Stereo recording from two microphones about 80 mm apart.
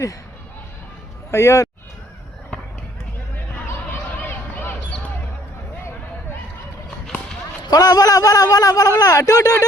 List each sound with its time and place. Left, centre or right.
1.3 s speech: left
3.3 s a sound: left
7.7 s a man's voice: left